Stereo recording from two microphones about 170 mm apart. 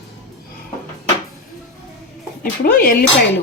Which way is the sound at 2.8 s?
60° left (ahead or behind).